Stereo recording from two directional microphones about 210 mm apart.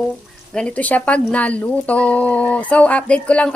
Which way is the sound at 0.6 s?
5° left (ahead or behind).